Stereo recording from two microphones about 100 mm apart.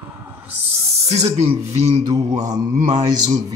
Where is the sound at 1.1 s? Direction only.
90° right.